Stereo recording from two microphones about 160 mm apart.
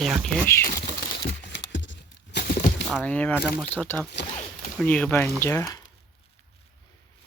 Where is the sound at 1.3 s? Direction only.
90° left.